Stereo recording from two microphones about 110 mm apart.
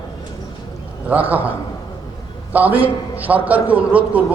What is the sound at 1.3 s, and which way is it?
A man's voice, 15° right (ahead or behind).